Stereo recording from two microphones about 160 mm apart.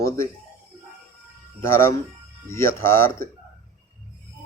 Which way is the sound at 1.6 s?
15° left (ahead or behind).